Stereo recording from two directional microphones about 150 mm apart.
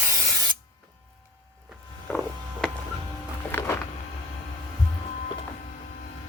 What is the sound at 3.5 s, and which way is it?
Music, 15° left (ahead or behind).